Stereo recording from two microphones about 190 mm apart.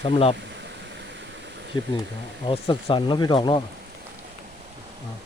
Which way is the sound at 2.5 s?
25° left (ahead or behind).